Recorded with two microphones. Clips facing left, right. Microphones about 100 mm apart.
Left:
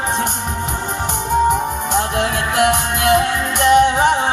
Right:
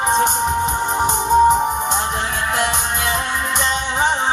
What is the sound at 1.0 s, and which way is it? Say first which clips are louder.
Music: right 3 dB; 20° right (ahead or behind).